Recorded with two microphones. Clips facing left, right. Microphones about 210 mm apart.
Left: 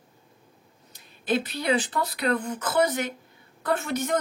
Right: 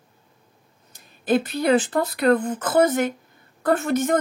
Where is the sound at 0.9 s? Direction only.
50° right (ahead or behind).